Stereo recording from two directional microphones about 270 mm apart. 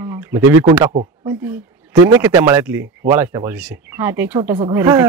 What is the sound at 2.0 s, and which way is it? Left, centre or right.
Speech, centre.